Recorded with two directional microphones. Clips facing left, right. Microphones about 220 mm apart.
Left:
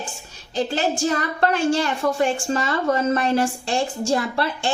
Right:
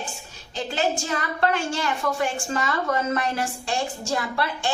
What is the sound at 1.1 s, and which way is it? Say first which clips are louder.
A woman's voice: left 3 dB; 40° left (ahead or behind).